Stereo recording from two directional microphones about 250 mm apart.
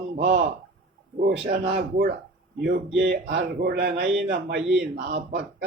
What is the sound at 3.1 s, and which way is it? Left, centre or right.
Speech, right.